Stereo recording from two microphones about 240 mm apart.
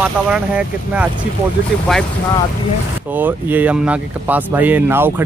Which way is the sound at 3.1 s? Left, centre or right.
Centre.